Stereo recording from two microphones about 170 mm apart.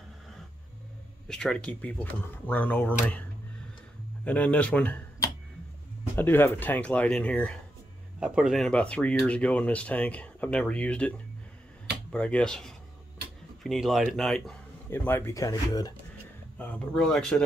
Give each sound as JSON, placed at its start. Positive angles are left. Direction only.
{"t": 1.2, "sound": "speech", "side_deg": 5}
{"t": 6.1, "sound": "speech", "side_deg": 15}
{"t": 8.2, "sound": "a man's voice", "side_deg": -5}
{"t": 14.9, "sound": "speech", "side_deg": 15}
{"t": 16.5, "sound": "a man's voice", "side_deg": 10}